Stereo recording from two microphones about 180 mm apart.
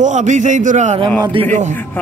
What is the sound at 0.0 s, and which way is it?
A man's voice, 45° right (ahead or behind).